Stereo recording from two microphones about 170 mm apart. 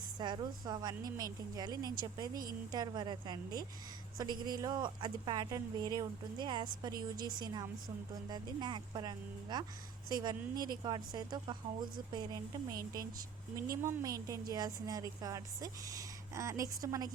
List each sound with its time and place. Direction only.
0.2 s a woman's voice: 25° right (ahead or behind)
2.3 s a woman's voice: 60° right (ahead or behind)
2.7 s a woman's voice: 25° right (ahead or behind)
13.8 s a woman's voice: 20° right (ahead or behind)